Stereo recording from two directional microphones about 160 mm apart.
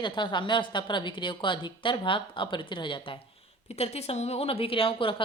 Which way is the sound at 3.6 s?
40° left (ahead or behind).